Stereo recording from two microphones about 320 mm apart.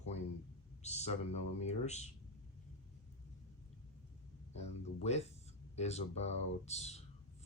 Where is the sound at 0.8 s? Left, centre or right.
Left.